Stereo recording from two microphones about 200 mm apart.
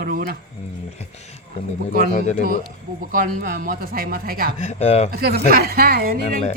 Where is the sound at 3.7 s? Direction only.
45° right (ahead or behind).